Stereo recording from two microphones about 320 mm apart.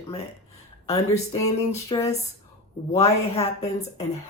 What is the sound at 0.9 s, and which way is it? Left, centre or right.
Speech, centre.